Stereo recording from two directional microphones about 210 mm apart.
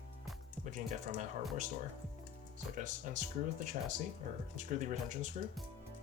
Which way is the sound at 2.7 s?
35° right (ahead or behind).